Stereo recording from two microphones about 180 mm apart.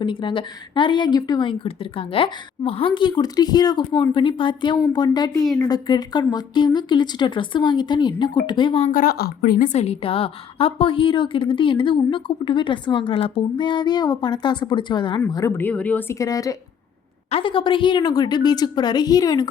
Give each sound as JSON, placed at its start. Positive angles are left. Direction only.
{"t": 0.0, "sound": "a woman's voice", "side_deg": 25}
{"t": 5.3, "sound": "a woman's voice", "side_deg": 0}
{"t": 5.5, "sound": "a woman's voice", "side_deg": 20}
{"t": 8.9, "sound": "speech", "side_deg": 55}
{"t": 9.6, "sound": "a woman's voice", "side_deg": 35}